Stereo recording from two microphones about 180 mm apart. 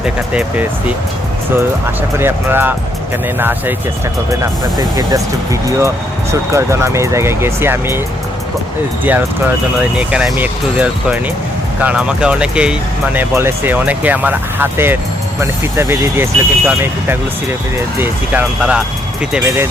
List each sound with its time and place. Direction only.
0.0 s speech: 5° right (ahead or behind)
4.8 s speech: 20° right (ahead or behind)
9.0 s speech: 10° right (ahead or behind)